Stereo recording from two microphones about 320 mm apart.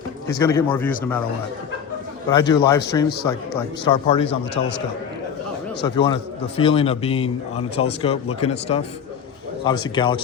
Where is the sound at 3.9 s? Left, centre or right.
Centre.